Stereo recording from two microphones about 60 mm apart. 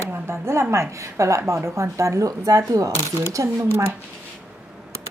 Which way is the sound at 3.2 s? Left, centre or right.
Right.